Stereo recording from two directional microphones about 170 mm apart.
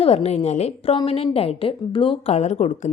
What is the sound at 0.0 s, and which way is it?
A woman's voice, 35° left (ahead or behind).